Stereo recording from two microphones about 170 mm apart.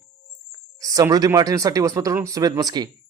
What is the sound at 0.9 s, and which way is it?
Speech, 20° right (ahead or behind).